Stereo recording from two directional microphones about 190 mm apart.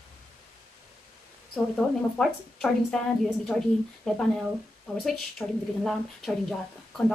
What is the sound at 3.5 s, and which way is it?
A woman's voice, centre (ahead or behind).